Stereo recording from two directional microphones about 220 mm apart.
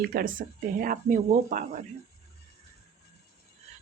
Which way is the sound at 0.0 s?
45° right (ahead or behind).